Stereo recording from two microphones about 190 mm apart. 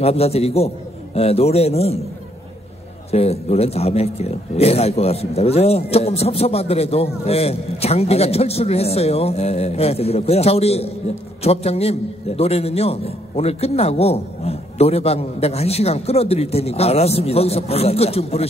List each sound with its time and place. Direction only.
0.0 s a man's voice: 35° left (ahead or behind)
3.1 s a man's voice: 35° left (ahead or behind)